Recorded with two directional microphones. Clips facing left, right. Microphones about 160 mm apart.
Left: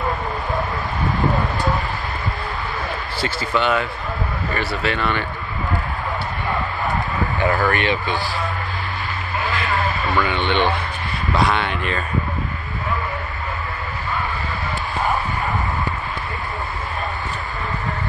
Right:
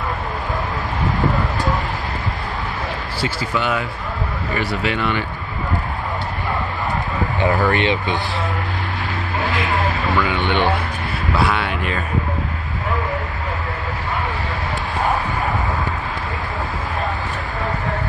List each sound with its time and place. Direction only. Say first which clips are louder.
3.2 s speech: left 1 dB; 10° right (ahead or behind)
7.3 s speech: right 2 dB; 20° right (ahead or behind)
10.1 s speech: even; 10° right (ahead or behind)